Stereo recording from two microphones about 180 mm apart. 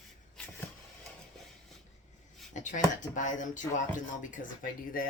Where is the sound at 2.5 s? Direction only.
45° left (ahead or behind).